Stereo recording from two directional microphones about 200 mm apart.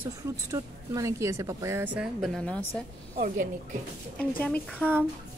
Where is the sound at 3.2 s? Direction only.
40° right (ahead or behind).